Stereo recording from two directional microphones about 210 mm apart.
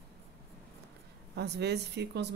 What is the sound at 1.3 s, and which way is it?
Speech, 55° right (ahead or behind).